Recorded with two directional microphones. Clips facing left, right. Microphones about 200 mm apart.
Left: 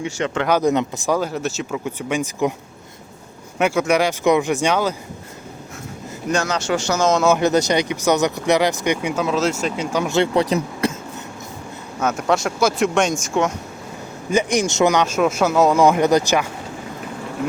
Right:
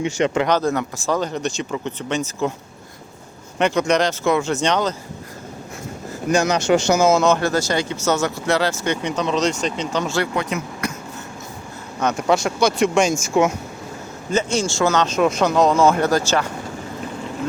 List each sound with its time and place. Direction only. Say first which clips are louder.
0.4 s speech: left 2 dB; 15° left (ahead or behind)
3.6 s speech: even; 5° left (ahead or behind)
6.3 s speech: right 4 dB; 15° right (ahead or behind)
7.0 s speech: right 2 dB; 5° right (ahead or behind)
7.3 s speech: left 2 dB; 15° left (ahead or behind)
10.3 s speech: left 5 dB; 35° left (ahead or behind)
11.9 s speech: right 1 dB; 5° left (ahead or behind)
14.3 s speech: left 2 dB; 15° left (ahead or behind)